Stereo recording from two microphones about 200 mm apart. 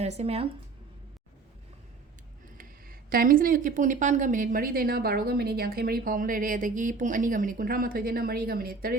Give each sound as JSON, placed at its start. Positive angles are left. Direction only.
{"t": 0.0, "sound": "speech", "side_deg": -30}
{"t": 2.6, "sound": "speech", "side_deg": -45}